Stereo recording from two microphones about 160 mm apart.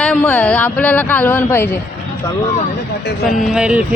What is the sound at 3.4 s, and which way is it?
Speech, 5° right (ahead or behind).